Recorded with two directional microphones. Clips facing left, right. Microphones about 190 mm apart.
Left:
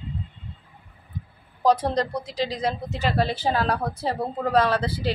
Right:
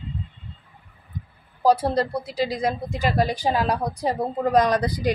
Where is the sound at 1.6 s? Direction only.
10° right (ahead or behind).